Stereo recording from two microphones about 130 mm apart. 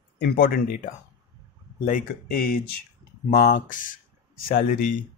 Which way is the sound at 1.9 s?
90° left.